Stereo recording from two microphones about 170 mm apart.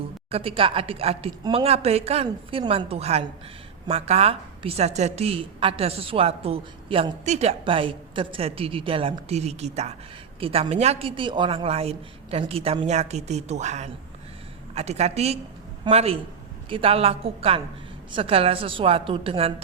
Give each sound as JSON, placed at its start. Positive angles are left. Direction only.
{"t": 0.3, "sound": "a woman's voice", "side_deg": -35}